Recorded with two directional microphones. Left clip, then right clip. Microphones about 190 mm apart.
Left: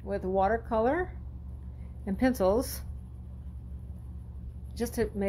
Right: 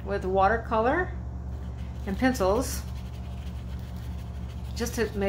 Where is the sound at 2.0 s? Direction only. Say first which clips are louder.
Right 1 dB; 40° left (ahead or behind).